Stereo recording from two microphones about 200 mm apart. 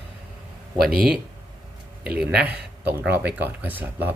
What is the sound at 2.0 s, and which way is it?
Speech, 5° right (ahead or behind).